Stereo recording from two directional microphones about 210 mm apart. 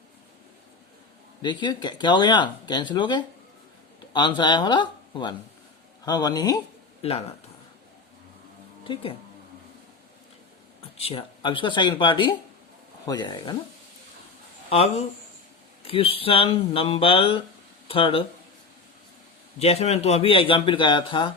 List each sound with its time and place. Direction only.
1.4 s speech: 20° left (ahead or behind)
7.0 s speech: 30° left (ahead or behind)
8.8 s speech: 25° left (ahead or behind)
10.9 s speech: 30° left (ahead or behind)
14.7 s speech: 30° left (ahead or behind)
19.5 s speech: 30° left (ahead or behind)